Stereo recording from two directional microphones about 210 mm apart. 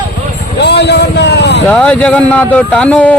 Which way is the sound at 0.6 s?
55° left (ahead or behind).